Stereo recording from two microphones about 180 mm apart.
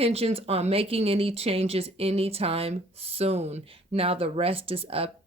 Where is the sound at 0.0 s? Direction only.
35° right (ahead or behind).